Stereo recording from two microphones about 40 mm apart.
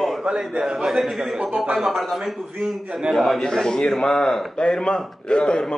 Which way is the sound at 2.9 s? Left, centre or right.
Centre.